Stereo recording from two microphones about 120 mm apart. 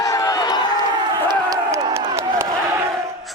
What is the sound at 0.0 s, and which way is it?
Crowd, 30° left (ahead or behind).